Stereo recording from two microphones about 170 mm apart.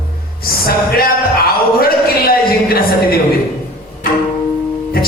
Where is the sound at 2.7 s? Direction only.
65° left (ahead or behind).